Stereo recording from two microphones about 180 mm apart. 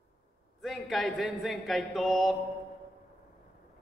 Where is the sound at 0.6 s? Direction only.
Centre (ahead or behind).